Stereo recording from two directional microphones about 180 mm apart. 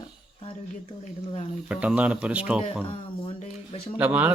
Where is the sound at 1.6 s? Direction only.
5° right (ahead or behind).